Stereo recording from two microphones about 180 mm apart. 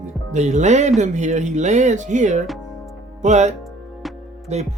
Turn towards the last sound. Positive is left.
turn(degrees=-40)  # may be behind; listen again after turning